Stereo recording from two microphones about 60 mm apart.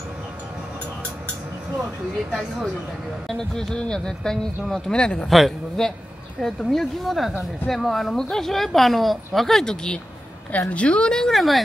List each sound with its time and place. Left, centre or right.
3.3 s speech: centre
4.9 s speech: centre
5.3 s a woman's voice: centre
10.5 s speech: left; by 11.6 s centre